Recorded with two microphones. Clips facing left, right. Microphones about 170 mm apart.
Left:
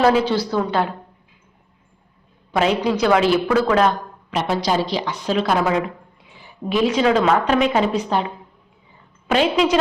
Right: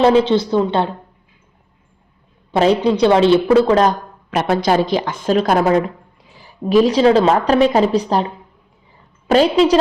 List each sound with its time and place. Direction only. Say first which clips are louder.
0.0 s a woman's voice: right 4 dB; 25° right (ahead or behind)
2.5 s a woman's voice: right 5 dB; 30° right (ahead or behind)
4.3 s a woman's voice: right 5 dB; 55° right (ahead or behind); by 9.7 s 35° right (ahead or behind)